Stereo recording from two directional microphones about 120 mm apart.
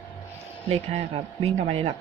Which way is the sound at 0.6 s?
60° right (ahead or behind).